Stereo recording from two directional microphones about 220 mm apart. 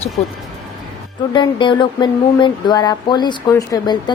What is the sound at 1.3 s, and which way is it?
A woman's voice, 20° left (ahead or behind).